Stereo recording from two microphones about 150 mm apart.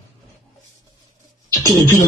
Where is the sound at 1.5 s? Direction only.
25° right (ahead or behind).